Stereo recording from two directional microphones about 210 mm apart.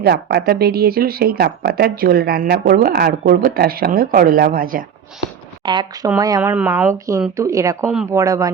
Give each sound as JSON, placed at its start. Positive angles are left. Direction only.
{"t": 0.0, "sound": "speech", "side_deg": -50}
{"t": 5.6, "sound": "speech", "side_deg": -20}
{"t": 7.9, "sound": "speech", "side_deg": -5}
{"t": 8.2, "sound": "speech", "side_deg": -15}